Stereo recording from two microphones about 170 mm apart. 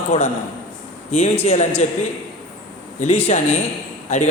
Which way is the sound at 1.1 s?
40° left (ahead or behind).